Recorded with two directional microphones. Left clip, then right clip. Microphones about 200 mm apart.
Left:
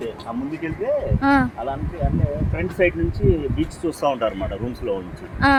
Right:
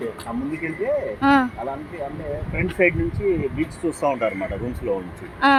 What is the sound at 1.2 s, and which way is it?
A woman's voice, 5° left (ahead or behind).